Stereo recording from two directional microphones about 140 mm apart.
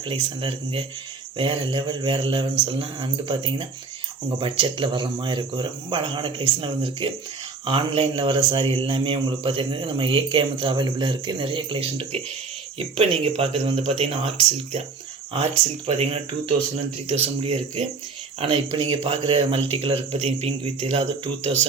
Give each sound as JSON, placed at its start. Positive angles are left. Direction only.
{"t": 0.1, "sound": "a man's voice", "side_deg": -40}
{"t": 15.9, "sound": "a man's voice", "side_deg": -45}